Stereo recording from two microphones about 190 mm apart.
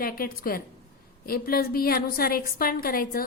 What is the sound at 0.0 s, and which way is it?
A woman's voice, 50° left (ahead or behind).